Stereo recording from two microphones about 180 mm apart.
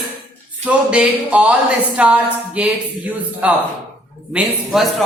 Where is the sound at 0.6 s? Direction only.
5° right (ahead or behind).